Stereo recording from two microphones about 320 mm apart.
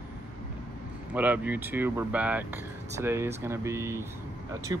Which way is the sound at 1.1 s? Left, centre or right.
Centre.